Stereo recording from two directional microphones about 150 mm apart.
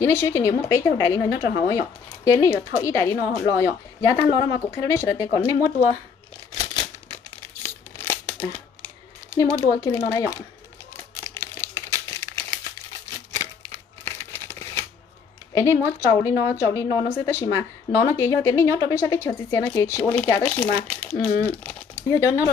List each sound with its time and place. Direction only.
0.0 s a woman's voice: 20° left (ahead or behind)
6.6 s crumpling: 25° left (ahead or behind)
7.6 s crumpling: 15° left (ahead or behind)
9.7 s a woman's voice: 15° left (ahead or behind)
11.3 s crumpling: 20° left (ahead or behind)
14.0 s crumpling: 15° left (ahead or behind)
15.5 s a woman's voice: 20° left (ahead or behind)